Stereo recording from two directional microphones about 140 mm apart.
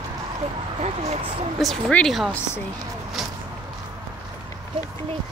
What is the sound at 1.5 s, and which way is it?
Speech, centre (ahead or behind).